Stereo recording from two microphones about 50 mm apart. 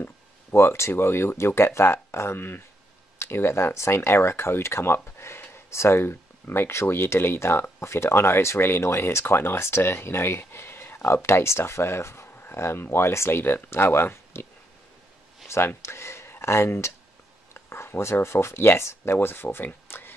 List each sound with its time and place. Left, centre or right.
0.0 s speech: left
11.2 s speech: left
13.4 s speech: left
15.4 s a sound: left
17.6 s speech: left
19.2 s speech: left